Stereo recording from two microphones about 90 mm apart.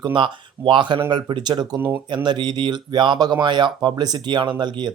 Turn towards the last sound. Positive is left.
turn(degrees=-55)  # may be behind; listen again after turning